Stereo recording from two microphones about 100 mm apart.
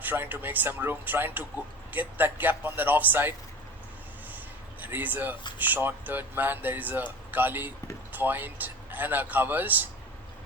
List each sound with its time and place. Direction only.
0.0 s speech: 20° right (ahead or behind)
4.3 s a sound: 20° right (ahead or behind)
5.5 s speech: 20° right (ahead or behind)